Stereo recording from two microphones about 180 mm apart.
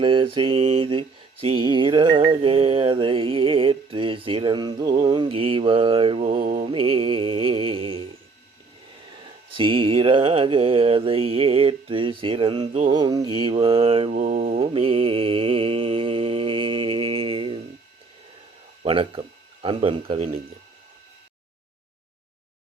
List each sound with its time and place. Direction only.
0.0 s mantra: 30° right (ahead or behind)
6.4 s mantra: 40° right (ahead or behind)
6.7 s music: 30° right (ahead or behind)
9.2 s mantra: 30° right (ahead or behind)
18.8 s speech: 30° right (ahead or behind)
19.6 s mantra: 30° right (ahead or behind)